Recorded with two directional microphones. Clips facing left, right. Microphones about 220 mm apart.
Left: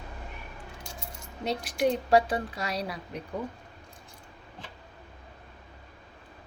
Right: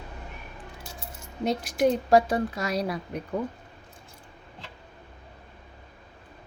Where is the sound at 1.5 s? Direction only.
45° right (ahead or behind).